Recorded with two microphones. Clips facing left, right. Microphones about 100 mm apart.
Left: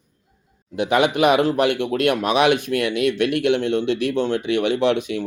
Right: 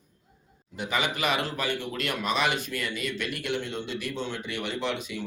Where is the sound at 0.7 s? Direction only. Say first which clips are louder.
Left 11 dB; 65° left (ahead or behind).